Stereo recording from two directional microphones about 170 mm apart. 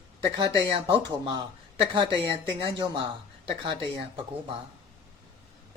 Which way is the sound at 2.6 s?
30° right (ahead or behind).